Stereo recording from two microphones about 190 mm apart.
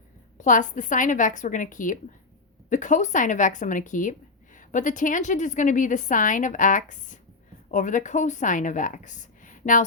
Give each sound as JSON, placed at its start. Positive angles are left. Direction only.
{"t": 0.3, "sound": "a woman's voice", "side_deg": 40}